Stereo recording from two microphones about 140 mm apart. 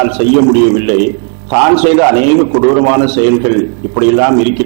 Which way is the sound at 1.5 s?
15° right (ahead or behind).